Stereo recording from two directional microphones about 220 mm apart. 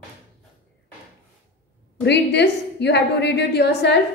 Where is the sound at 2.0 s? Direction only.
50° left (ahead or behind).